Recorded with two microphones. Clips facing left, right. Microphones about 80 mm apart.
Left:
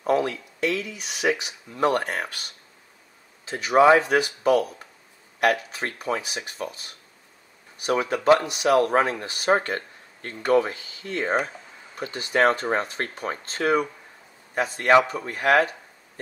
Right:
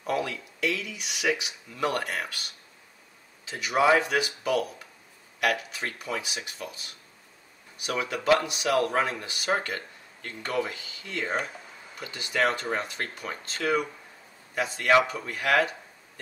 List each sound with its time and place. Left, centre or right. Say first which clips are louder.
0.0 s speech: left 6 dB; left
3.4 s speech: left 6 dB; left